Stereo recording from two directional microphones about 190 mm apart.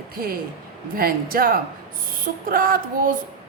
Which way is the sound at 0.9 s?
50° right (ahead or behind).